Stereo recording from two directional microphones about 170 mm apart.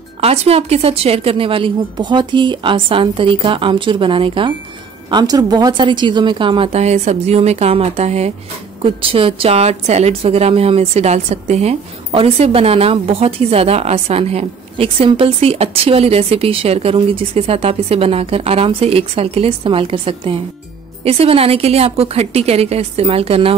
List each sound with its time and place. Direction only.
0.2 s a woman's voice: 35° right (ahead or behind)